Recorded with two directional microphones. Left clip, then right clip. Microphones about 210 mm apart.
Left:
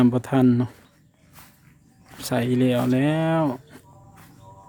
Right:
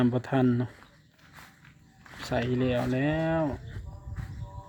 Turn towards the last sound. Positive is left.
turn(degrees=25)  # may be behind; listen again after turning